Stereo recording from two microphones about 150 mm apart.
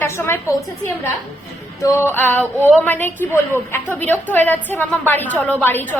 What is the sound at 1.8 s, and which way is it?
A woman's voice, 15° left (ahead or behind).